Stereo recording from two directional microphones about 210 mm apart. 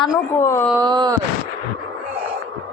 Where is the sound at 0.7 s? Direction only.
20° right (ahead or behind).